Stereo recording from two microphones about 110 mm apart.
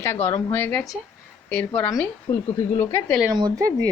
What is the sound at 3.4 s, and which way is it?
Speech, 35° right (ahead or behind).